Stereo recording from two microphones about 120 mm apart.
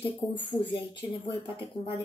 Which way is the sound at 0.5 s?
30° left (ahead or behind).